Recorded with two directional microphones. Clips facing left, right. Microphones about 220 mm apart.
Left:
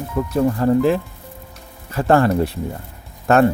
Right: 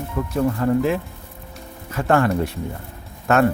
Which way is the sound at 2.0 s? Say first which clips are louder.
Left 3 dB; 35° left (ahead or behind).